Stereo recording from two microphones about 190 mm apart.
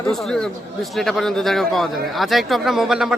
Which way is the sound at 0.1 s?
5° left (ahead or behind).